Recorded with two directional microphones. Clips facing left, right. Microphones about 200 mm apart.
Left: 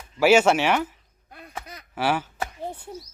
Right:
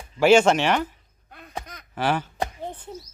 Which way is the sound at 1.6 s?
10° left (ahead or behind).